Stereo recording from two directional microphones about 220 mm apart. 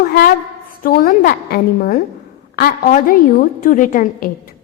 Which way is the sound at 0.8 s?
40° left (ahead or behind).